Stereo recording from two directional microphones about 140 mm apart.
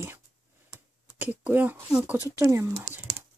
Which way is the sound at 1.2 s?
10° right (ahead or behind).